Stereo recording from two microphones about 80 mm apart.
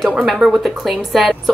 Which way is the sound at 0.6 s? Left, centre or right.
Centre.